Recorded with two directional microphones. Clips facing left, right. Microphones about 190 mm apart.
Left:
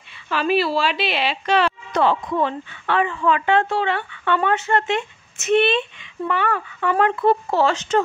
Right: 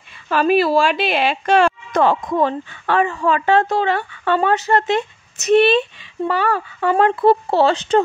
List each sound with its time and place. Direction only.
0.3 s a woman's voice: 45° right (ahead or behind)